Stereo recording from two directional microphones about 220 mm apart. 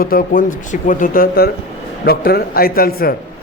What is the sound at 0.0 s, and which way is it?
A man's voice, 40° left (ahead or behind).